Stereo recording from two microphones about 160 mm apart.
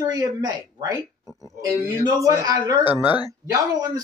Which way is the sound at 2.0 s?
20° right (ahead or behind).